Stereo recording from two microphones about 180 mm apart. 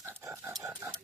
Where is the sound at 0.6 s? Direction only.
15° right (ahead or behind).